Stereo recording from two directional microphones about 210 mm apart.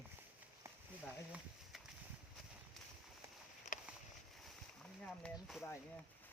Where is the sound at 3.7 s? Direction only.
35° left (ahead or behind).